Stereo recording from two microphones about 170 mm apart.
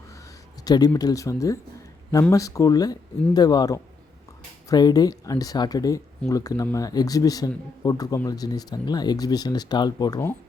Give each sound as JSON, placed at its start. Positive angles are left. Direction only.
{"t": 0.6, "sound": "speech", "side_deg": 20}